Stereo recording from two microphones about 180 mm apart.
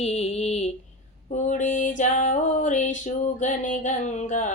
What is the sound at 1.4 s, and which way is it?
Music, 45° left (ahead or behind).